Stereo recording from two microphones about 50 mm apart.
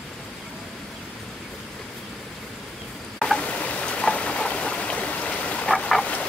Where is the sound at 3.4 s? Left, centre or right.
Left.